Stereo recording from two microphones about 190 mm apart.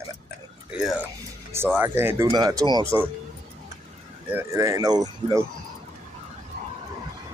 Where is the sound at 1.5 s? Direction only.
10° right (ahead or behind).